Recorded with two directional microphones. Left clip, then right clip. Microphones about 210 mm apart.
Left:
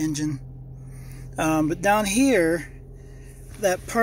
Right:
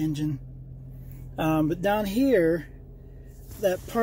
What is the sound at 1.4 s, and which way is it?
Speech, 10° right (ahead or behind).